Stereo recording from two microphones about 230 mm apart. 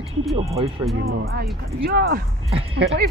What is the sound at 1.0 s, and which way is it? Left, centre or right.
Speech, right.